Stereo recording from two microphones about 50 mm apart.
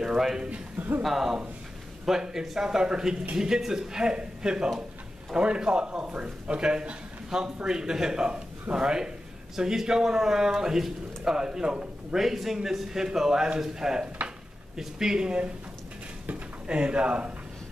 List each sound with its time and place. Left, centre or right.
0.0 s a man's voice: centre
0.5 s a man's voice: right
1.0 s a man's voice: centre
12.2 s a man's voice: centre
16.6 s a man's voice: right